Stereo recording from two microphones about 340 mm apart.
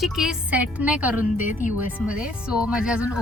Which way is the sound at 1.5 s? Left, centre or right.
Left.